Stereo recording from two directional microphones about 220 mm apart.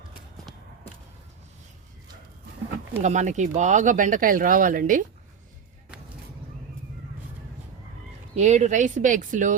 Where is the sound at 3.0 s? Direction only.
35° right (ahead or behind).